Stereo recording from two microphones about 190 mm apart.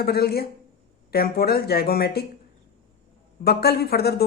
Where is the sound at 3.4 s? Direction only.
55° left (ahead or behind).